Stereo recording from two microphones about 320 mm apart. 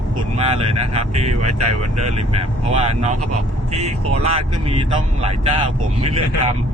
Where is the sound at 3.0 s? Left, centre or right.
Right.